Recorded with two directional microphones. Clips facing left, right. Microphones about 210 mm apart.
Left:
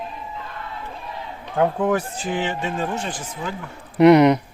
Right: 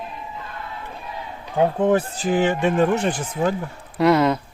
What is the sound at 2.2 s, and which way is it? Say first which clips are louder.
Speech: right 6 dB; 45° right (ahead or behind).